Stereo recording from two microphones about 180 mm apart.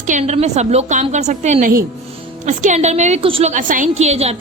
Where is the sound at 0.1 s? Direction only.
40° right (ahead or behind).